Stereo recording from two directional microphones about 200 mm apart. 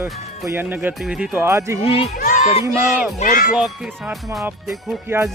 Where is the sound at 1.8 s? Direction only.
25° left (ahead or behind).